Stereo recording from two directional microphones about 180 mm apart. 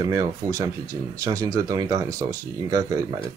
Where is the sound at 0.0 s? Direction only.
20° right (ahead or behind).